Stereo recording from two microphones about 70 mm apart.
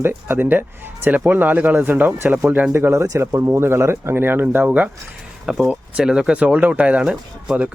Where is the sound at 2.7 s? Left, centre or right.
Right.